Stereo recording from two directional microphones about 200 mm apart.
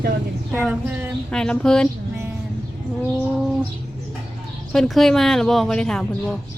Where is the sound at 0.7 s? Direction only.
10° right (ahead or behind).